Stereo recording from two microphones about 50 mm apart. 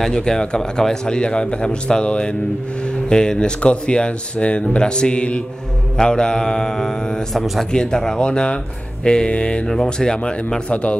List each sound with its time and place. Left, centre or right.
0.0 s a man's voice: centre
10.7 s speech: left